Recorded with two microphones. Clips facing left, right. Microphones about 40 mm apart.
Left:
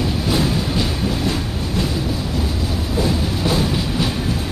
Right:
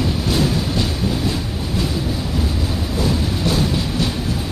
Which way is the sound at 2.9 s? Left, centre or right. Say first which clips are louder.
Left 1 dB; centre.